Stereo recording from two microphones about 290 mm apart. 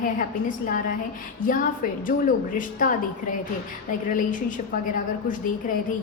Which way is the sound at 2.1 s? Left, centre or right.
Left.